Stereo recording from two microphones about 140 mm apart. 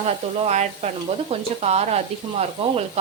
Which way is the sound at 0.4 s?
55° right (ahead or behind).